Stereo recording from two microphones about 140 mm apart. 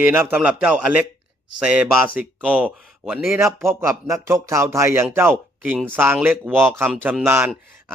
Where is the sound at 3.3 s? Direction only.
20° right (ahead or behind).